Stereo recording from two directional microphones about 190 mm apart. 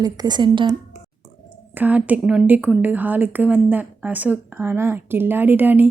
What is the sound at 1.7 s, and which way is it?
A woman's voice, 10° right (ahead or behind).